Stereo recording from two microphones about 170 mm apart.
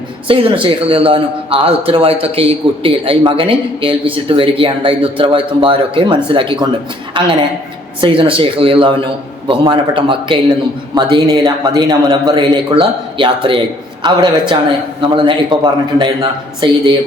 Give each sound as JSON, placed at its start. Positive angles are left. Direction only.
{"t": 0.3, "sound": "a man's voice", "side_deg": -30}
{"t": 8.0, "sound": "a man's voice", "side_deg": -30}